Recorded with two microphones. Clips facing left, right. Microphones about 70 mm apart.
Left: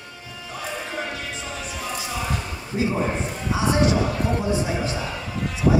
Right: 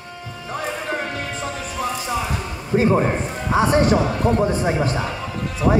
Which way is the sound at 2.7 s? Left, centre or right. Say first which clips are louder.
Right 7 dB; right.